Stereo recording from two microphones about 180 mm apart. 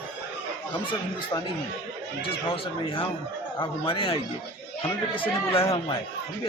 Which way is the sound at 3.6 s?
30° left (ahead or behind).